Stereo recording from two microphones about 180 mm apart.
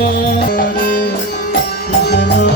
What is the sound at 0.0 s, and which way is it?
Music, 60° left (ahead or behind).